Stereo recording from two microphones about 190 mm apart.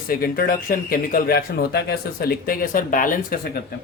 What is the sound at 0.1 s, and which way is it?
Speech, 50° left (ahead or behind).